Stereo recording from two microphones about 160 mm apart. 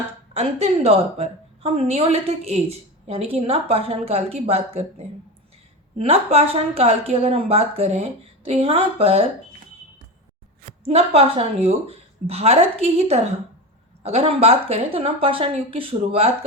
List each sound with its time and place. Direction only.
0.3 s a woman's voice: 40° right (ahead or behind)
6.0 s a woman's voice: 40° right (ahead or behind)
10.7 s a woman's voice: 40° right (ahead or behind)